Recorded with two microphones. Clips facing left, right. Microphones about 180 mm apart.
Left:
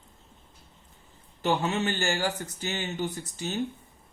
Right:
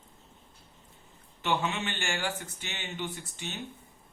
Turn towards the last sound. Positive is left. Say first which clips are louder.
# left 7 dB
turn(degrees=40)  # may be behind; listen again after turning